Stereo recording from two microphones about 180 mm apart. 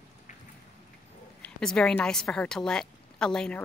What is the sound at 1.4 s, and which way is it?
A woman's voice, 5° left (ahead or behind).